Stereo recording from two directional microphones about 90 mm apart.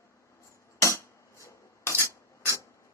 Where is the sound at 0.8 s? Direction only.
35° left (ahead or behind).